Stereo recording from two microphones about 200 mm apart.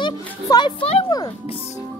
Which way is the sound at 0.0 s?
20° left (ahead or behind).